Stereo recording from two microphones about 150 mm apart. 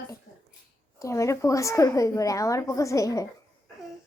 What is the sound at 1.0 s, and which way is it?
Speech, 20° left (ahead or behind).